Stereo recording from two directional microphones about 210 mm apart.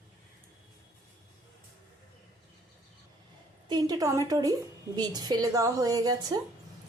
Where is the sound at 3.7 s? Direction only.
20° right (ahead or behind).